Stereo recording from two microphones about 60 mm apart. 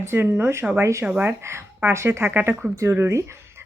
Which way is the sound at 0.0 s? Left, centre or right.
Right.